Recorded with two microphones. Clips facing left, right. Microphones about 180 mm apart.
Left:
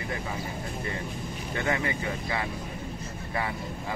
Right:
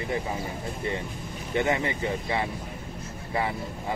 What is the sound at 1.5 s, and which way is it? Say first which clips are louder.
Speech: right 4 dB; 20° right (ahead or behind).